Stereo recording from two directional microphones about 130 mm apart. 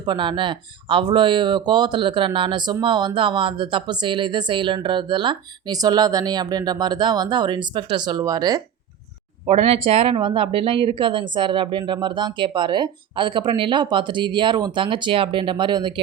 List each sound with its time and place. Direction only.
0.0 s speech: 40° right (ahead or behind)
9.5 s speech: 50° right (ahead or behind)